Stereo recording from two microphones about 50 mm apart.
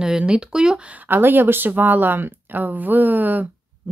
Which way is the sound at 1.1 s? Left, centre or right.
Right.